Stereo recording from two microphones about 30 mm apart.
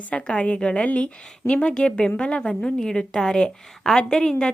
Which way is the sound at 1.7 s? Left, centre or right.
Left.